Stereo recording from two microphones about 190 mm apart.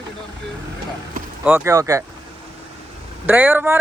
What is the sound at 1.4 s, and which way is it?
Speech, 10° right (ahead or behind).